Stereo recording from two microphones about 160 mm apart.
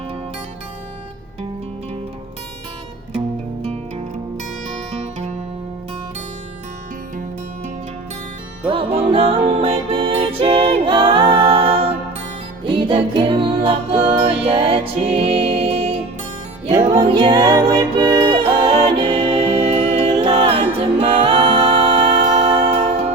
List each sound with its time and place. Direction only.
3.6 s music: 40° right (ahead or behind)
8.6 s music: 35° right (ahead or behind)
19.7 s music: 40° right (ahead or behind)
20.2 s music: 35° right (ahead or behind)